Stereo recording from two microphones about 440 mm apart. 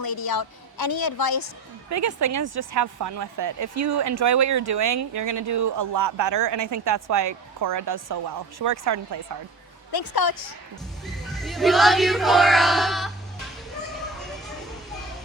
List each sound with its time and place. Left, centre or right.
0.0 s a woman's voice: left
1.9 s speech: right
5.7 s speech: right
6.1 s speech: right
9.9 s a woman's voice: left
11.0 s speech: centre